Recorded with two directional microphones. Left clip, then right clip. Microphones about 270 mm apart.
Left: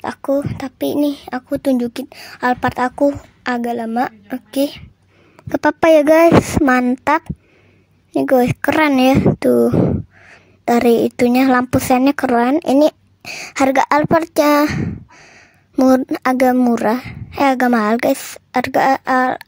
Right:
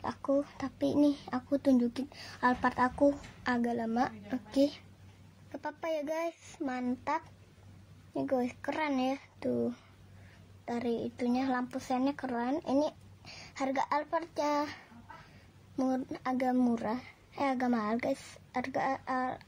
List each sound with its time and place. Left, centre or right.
0.0 s speech: left